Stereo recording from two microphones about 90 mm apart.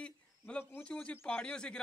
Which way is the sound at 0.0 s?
10° left (ahead or behind).